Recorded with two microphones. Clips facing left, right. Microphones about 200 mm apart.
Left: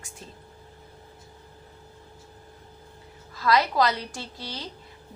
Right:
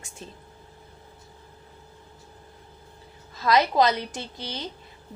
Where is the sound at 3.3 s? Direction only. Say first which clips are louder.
Right 2 dB; 20° right (ahead or behind).